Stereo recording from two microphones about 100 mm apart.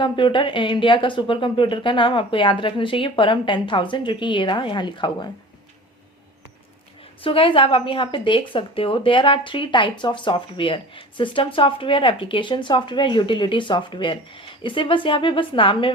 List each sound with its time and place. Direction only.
0.0 s speech: 55° left (ahead or behind)
7.2 s speech: 65° left (ahead or behind)